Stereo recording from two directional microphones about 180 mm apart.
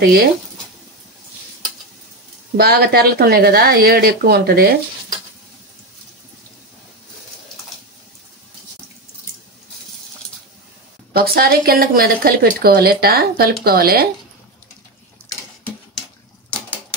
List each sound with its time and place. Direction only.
2.5 s speech: 60° right (ahead or behind)
11.1 s speech: 55° right (ahead or behind)